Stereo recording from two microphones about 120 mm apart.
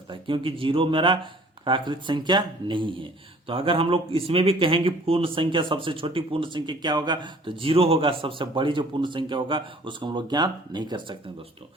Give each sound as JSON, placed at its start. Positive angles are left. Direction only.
{"t": 0.1, "sound": "speech", "side_deg": -45}